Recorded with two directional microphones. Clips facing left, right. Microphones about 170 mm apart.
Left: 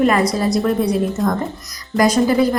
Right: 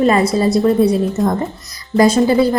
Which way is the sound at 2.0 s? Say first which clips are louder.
Right 3 dB; 25° right (ahead or behind).